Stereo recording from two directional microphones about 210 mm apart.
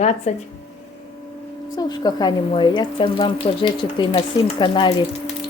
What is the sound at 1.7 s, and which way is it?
Speech, 20° left (ahead or behind).